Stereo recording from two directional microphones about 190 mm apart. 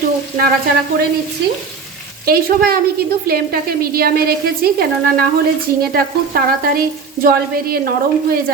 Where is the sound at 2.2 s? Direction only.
50° right (ahead or behind).